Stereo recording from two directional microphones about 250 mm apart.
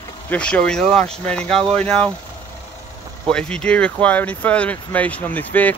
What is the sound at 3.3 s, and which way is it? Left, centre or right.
Speech, centre.